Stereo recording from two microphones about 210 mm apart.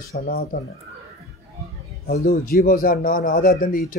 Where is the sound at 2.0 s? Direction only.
45° left (ahead or behind).